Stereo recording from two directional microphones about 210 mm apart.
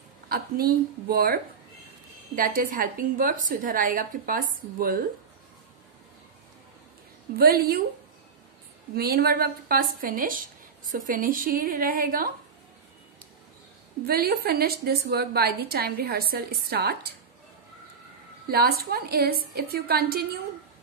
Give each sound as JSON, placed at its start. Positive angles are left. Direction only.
{"t": 0.3, "sound": "a woman's voice", "side_deg": -45}
{"t": 7.3, "sound": "a woman's voice", "side_deg": -45}
{"t": 8.9, "sound": "a woman's voice", "side_deg": -45}
{"t": 14.0, "sound": "a woman's voice", "side_deg": -45}
{"t": 18.5, "sound": "a woman's voice", "side_deg": -45}